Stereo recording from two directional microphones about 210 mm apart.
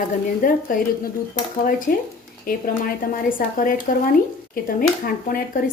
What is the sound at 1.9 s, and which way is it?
Speech, 45° left (ahead or behind).